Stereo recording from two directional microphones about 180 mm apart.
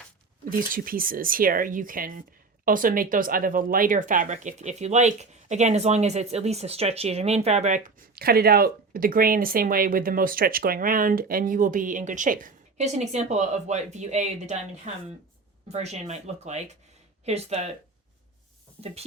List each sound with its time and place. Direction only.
0.5 s speech: 50° right (ahead or behind)
8.1 s speech: 60° right (ahead or behind); by 17.7 s 35° right (ahead or behind)